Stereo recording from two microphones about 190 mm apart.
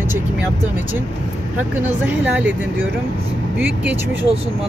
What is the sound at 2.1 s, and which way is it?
Speech, 10° right (ahead or behind).